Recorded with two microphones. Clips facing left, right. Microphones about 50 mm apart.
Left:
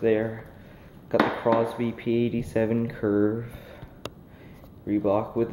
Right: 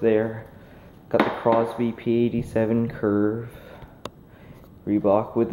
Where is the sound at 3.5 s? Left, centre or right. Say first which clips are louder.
Right 1 dB; centre.